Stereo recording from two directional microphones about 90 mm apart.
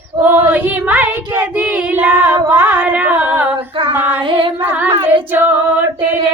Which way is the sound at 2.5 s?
15° right (ahead or behind).